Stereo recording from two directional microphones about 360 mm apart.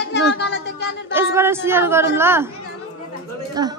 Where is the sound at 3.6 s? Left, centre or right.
Centre.